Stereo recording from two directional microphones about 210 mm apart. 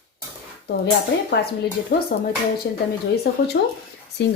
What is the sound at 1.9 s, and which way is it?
Speech, 50° left (ahead or behind).